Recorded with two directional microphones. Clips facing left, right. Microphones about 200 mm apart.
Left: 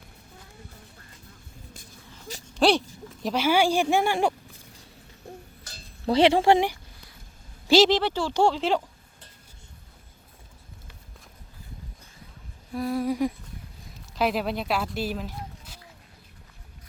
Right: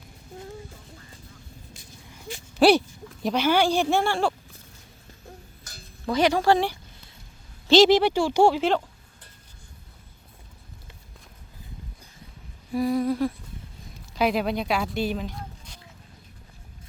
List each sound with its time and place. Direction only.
2.6 s a woman's voice: 5° right (ahead or behind); by 4.4 s 15° left (ahead or behind)
5.6 s a sound: 30° left (ahead or behind)
7.9 s speech: 10° right (ahead or behind)
12.7 s humming: centre (ahead or behind)
13.1 s a woman's voice: 15° left (ahead or behind)
14.2 s speech: centre (ahead or behind)